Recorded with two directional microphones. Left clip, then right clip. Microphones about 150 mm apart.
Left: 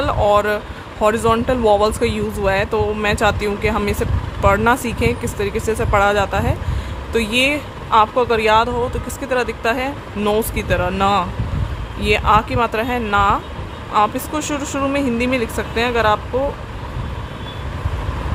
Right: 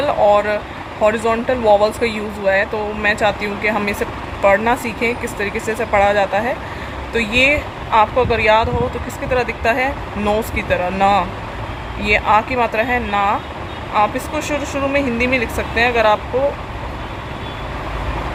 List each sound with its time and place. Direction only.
0.0 s speech: 40° left (ahead or behind)